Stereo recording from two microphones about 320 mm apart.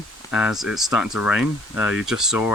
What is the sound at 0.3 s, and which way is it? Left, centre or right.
Speech, centre.